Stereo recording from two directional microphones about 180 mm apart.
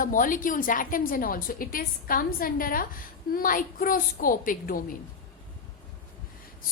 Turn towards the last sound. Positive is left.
turn(degrees=50)  # may be behind; listen again after turning